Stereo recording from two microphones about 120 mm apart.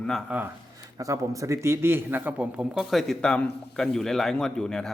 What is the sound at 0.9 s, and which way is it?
A man's voice, 30° right (ahead or behind).